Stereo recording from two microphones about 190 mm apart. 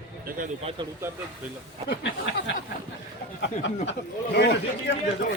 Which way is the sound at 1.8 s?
70° left (ahead or behind).